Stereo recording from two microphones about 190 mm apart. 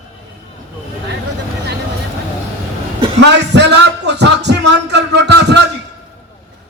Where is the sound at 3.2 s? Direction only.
65° right (ahead or behind).